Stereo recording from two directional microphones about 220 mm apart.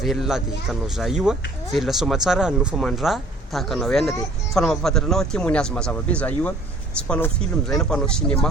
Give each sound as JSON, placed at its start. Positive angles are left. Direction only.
{"t": 0.0, "sound": "speech", "side_deg": 0}